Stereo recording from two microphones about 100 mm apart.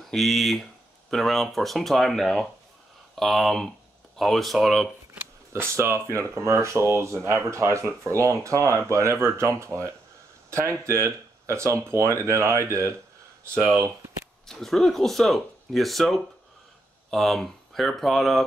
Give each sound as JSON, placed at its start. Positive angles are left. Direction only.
{"t": 0.0, "sound": "speech", "side_deg": 0}
{"t": 5.5, "sound": "speech", "side_deg": -30}
{"t": 14.4, "sound": "speech", "side_deg": 5}